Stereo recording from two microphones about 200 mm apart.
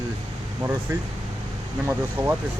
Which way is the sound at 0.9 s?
15° right (ahead or behind).